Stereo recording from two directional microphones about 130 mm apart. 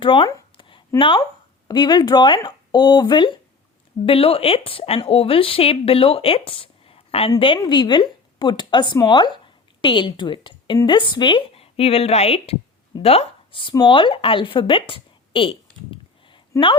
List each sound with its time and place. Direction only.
0.0 s speech: 40° left (ahead or behind)
4.0 s a woman's voice: 45° left (ahead or behind)